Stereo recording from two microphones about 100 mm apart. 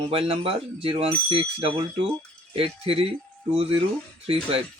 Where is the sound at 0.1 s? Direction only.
70° right (ahead or behind).